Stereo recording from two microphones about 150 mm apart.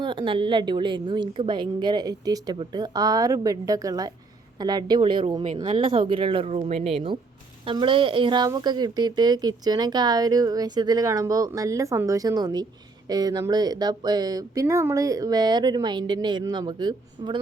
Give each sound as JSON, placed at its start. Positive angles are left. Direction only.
{"t": 0.0, "sound": "a woman's voice", "side_deg": -30}